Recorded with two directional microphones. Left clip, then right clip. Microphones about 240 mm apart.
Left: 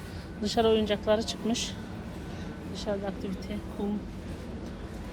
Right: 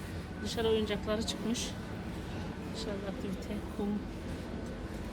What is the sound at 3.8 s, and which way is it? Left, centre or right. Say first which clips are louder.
Speech: left 3 dB; centre.